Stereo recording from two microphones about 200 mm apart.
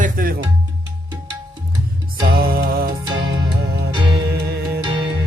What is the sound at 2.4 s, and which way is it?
Music, 45° right (ahead or behind).